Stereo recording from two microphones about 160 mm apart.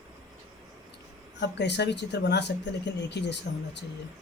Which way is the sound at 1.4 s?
90° left.